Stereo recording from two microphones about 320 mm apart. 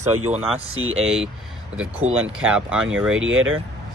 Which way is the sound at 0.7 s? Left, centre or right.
Right.